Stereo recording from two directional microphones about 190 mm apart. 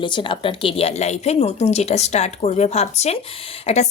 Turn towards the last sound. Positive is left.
turn(degrees=35)  # may be behind; listen again after turning